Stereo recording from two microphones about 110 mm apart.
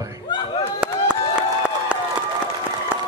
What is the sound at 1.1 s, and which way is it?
Crowd, 10° right (ahead or behind).